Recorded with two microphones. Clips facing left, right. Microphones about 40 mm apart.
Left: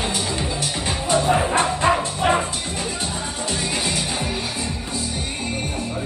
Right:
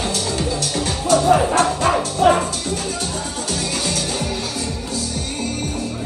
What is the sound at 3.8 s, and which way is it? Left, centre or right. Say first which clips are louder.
Music: right 1 dB; left.